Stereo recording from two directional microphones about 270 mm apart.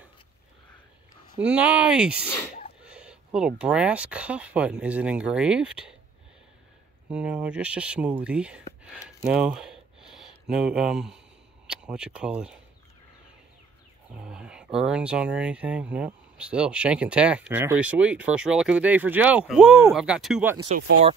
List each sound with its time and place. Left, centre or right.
1.4 s speech: centre
2.2 s speech: centre
2.8 s speech: centre
7.1 s speech: centre
8.6 s a sound: centre
11.6 s speech: centre
14.2 s speech: centre
20.6 s speech: right